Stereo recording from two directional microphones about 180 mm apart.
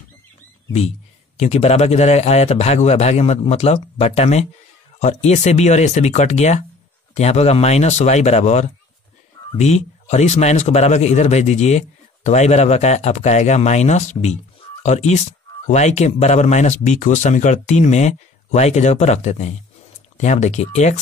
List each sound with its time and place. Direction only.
0.7 s speech: 35° left (ahead or behind)